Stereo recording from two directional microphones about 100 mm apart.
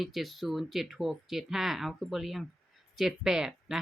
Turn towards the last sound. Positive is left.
turn(degrees=-5)  # may be behind; listen again after turning